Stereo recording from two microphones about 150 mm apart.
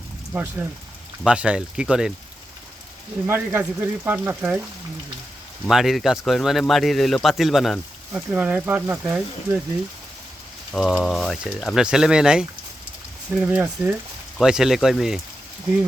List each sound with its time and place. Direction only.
0.3 s speech: 15° right (ahead or behind)
3.2 s speech: 15° right (ahead or behind)
5.6 s speech: centre (ahead or behind)
10.7 s speech: centre (ahead or behind)